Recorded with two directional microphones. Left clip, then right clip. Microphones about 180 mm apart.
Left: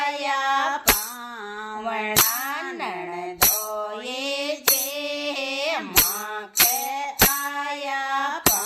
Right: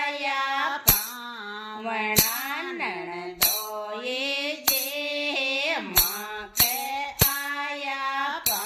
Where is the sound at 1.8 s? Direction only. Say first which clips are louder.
Left 2 dB; 40° left (ahead or behind).